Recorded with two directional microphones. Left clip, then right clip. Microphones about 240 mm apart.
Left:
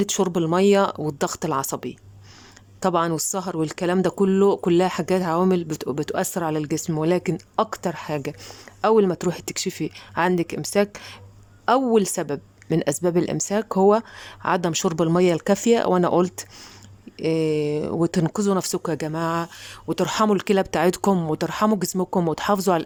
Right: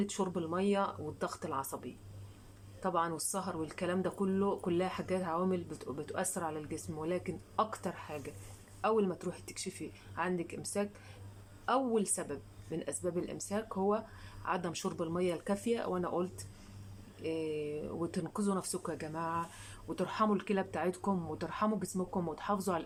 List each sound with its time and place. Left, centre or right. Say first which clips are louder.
0.0 s speech: left 14 dB; left